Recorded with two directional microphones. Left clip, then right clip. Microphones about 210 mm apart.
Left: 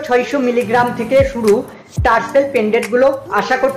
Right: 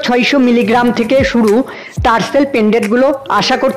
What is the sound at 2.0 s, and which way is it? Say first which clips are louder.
Speech: right 1 dB; 50° right (ahead or behind).